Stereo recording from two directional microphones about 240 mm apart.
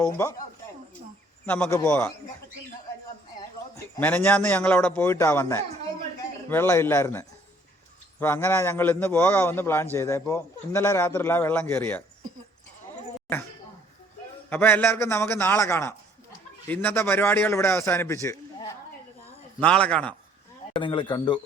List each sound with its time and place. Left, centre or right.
0.0 s a man's voice: centre
1.5 s a man's voice: centre
3.8 s a man's voice: centre
14.5 s a man's voice: centre
19.6 s a man's voice: centre
20.7 s speech: centre